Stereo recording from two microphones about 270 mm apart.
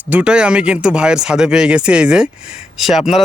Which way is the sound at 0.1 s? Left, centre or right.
Centre.